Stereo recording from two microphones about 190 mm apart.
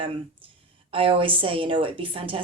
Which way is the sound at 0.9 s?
30° right (ahead or behind).